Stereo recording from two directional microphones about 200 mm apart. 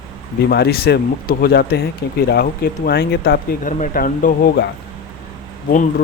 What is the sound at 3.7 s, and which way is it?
Speech, 40° left (ahead or behind).